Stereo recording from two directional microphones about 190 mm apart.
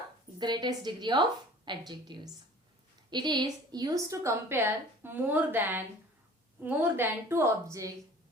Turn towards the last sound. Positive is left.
turn(degrees=-15)  # may be behind; listen again after turning